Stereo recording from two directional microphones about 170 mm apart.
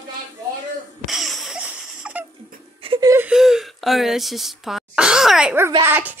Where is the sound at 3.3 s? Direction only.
Centre (ahead or behind).